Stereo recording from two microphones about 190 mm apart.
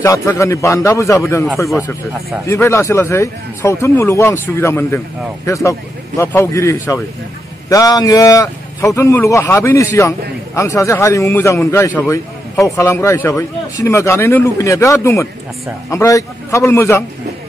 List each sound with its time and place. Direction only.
0.0 s speech: 15° left (ahead or behind)